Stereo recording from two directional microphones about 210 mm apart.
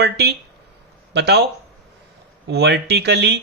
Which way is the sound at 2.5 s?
55° right (ahead or behind).